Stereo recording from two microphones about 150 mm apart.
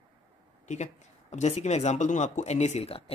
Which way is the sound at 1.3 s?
50° left (ahead or behind).